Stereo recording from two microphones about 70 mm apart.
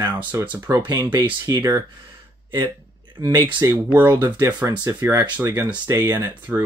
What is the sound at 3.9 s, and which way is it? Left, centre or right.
Speech, right.